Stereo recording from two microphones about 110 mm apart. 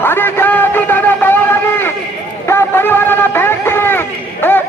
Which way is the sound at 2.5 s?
20° left (ahead or behind).